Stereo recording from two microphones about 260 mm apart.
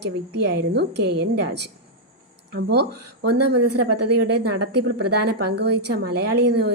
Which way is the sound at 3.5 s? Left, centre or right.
Right.